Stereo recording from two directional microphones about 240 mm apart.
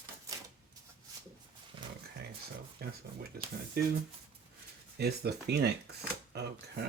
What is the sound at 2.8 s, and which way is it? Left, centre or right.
Speech, right.